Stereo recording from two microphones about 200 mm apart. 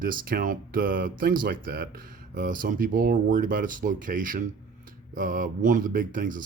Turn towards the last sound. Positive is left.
turn(degrees=-40)  # may be behind; listen again after turning